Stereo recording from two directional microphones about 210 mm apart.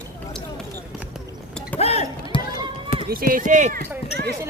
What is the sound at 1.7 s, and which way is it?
Chink, 30° left (ahead or behind).